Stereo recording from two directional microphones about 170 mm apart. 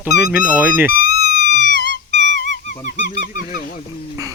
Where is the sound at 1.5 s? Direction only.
45° left (ahead or behind).